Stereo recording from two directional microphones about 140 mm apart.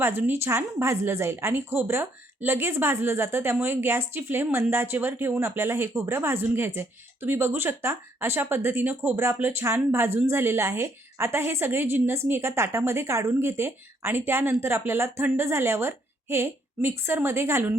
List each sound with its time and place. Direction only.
0.0 s a woman's voice: 15° right (ahead or behind)